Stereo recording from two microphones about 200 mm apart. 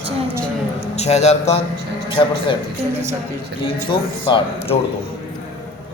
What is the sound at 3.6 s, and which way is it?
A man's voice, 25° left (ahead or behind).